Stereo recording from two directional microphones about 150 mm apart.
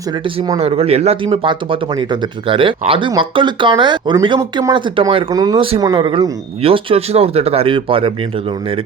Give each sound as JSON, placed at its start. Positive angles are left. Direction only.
{"t": 0.6, "sound": "speech", "side_deg": -40}
{"t": 4.4, "sound": "speech", "side_deg": -20}
{"t": 4.7, "sound": "speech", "side_deg": -35}